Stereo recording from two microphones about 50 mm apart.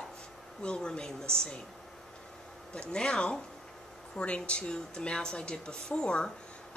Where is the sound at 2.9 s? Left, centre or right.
Centre.